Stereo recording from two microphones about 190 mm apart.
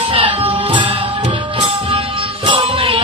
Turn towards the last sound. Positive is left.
turn(degrees=-30)  # may be behind; listen again after turning